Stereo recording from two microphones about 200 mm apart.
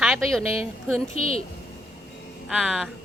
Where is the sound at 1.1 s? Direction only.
30° left (ahead or behind).